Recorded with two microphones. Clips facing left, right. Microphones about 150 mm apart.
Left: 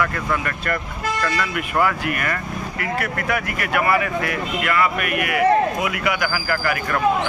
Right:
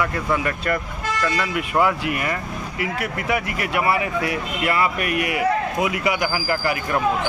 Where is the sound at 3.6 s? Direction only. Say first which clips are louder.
Left 3 dB; 25° right (ahead or behind).